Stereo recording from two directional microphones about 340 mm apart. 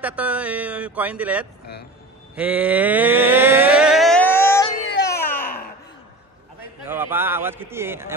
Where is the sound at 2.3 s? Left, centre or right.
Centre.